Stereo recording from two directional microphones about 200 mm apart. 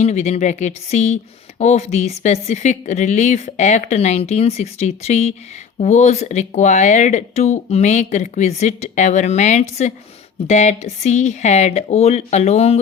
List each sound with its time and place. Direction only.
0.0 s speech: 35° left (ahead or behind)